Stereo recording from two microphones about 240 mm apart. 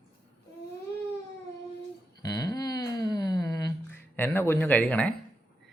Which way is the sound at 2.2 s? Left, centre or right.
Centre.